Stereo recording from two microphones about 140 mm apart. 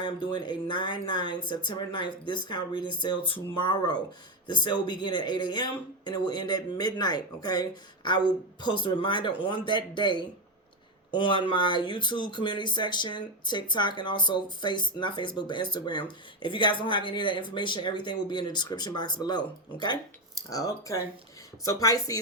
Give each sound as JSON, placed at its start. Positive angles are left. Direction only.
{"t": 0.0, "sound": "speech", "side_deg": 35}